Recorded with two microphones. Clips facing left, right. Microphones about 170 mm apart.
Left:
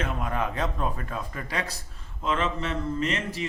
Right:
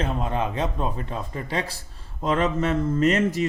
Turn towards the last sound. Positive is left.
turn(degrees=-45)  # may be behind; listen again after turning